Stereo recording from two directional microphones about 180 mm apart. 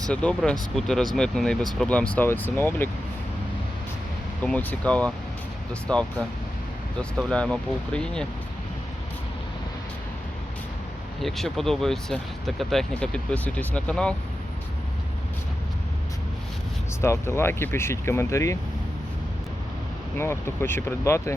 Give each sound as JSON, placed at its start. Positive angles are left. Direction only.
{"t": 0.1, "sound": "speech", "side_deg": 5}
{"t": 4.4, "sound": "speech", "side_deg": 5}
{"t": 11.2, "sound": "speech", "side_deg": 0}
{"t": 17.0, "sound": "speech", "side_deg": 15}
{"t": 20.1, "sound": "speech", "side_deg": 15}